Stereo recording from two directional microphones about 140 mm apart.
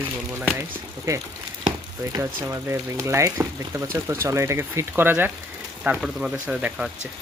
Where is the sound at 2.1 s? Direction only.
20° right (ahead or behind).